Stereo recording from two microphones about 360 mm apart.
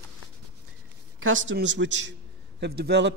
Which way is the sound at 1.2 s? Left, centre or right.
Right.